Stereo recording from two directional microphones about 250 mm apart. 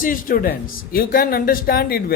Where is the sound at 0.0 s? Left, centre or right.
Left.